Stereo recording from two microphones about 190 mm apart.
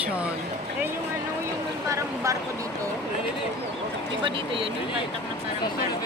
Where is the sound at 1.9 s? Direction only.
15° right (ahead or behind).